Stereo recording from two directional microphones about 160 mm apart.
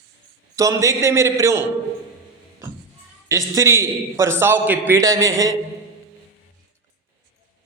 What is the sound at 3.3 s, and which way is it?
A man's voice, 20° right (ahead or behind).